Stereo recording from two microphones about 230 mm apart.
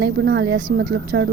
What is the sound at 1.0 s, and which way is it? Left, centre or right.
Speech, right.